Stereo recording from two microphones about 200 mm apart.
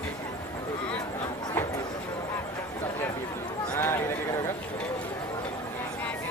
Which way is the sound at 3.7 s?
10° left (ahead or behind).